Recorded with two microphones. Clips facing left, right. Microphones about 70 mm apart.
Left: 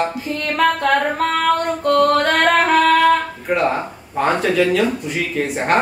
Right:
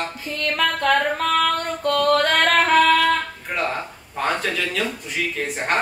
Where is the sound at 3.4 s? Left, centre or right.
Centre.